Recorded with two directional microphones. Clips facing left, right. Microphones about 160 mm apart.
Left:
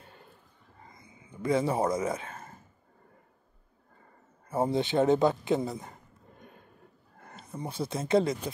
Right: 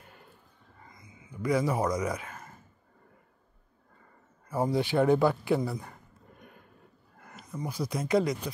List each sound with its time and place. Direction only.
0.8 s a sound: 30° left (ahead or behind)
4.5 s a man's voice: 25° left (ahead or behind)
7.2 s speech: 30° left (ahead or behind)